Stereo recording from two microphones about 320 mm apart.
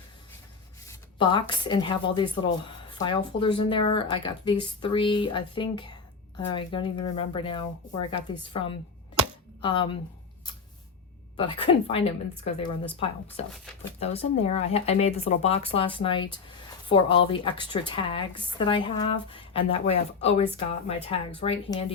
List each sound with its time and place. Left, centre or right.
0.9 s speech: centre
11.3 s speech: centre